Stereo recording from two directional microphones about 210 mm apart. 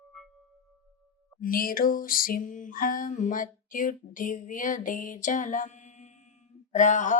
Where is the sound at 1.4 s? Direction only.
45° left (ahead or behind).